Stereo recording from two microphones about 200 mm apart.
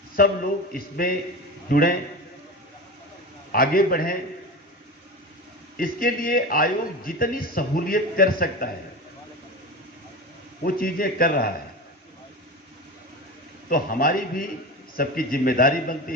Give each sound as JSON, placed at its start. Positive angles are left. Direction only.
{"t": 0.2, "sound": "a man's voice", "side_deg": 45}
{"t": 3.5, "sound": "a man's voice", "side_deg": 45}
{"t": 5.7, "sound": "a man's voice", "side_deg": 45}
{"t": 10.6, "sound": "a man's voice", "side_deg": 45}
{"t": 13.7, "sound": "a man's voice", "side_deg": 45}